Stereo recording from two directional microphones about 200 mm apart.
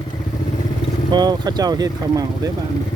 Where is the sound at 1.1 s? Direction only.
20° right (ahead or behind).